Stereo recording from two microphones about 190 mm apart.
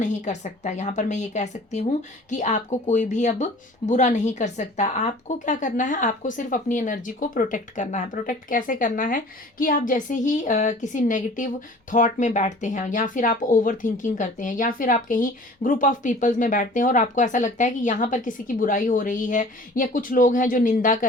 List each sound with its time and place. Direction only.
0.0 s a woman's voice: 40° left (ahead or behind)